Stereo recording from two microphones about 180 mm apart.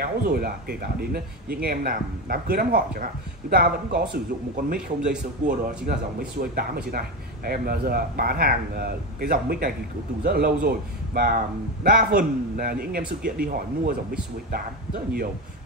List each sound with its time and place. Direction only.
0.0 s a man's voice: 55° right (ahead or behind)
5.9 s a man's voice: 55° right (ahead or behind)